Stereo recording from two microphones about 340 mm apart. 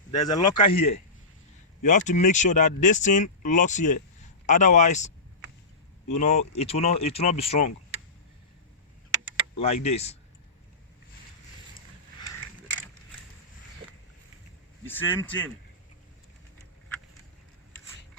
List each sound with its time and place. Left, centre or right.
0.1 s speech: centre
9.6 s speech: centre
14.8 s a man's voice: centre